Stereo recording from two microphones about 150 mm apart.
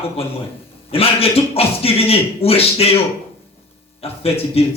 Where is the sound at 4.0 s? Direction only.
40° left (ahead or behind).